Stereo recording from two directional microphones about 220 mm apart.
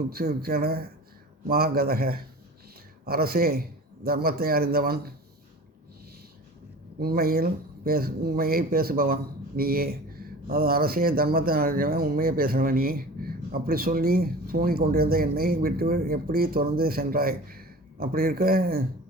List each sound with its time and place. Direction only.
0.1 s speech: 45° right (ahead or behind)
7.0 s speech: 45° right (ahead or behind)